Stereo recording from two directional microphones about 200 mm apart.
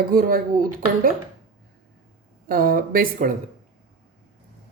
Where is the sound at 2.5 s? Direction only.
45° right (ahead or behind).